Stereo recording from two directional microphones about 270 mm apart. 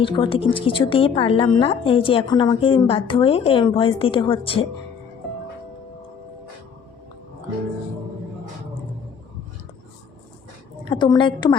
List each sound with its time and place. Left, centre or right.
0.0 s a woman's voice: centre
10.8 s a woman's voice: centre